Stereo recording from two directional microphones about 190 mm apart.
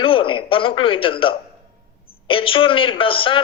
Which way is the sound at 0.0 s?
30° left (ahead or behind).